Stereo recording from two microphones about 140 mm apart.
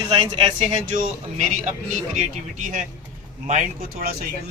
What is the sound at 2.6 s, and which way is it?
Speech, 65° right (ahead or behind).